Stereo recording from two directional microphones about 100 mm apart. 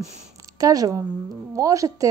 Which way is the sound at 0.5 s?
35° right (ahead or behind).